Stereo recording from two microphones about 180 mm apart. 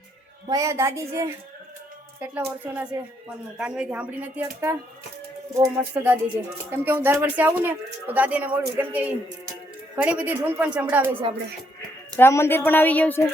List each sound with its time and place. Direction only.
0.4 s speech: 15° right (ahead or behind)
2.7 s speech: 10° right (ahead or behind)
11.1 s music: 30° right (ahead or behind)
12.1 s a woman's voice: 15° left (ahead or behind)